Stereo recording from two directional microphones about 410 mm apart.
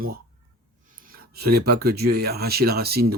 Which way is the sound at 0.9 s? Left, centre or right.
Centre.